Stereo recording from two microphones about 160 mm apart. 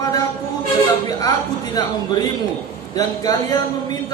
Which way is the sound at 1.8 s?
25° left (ahead or behind).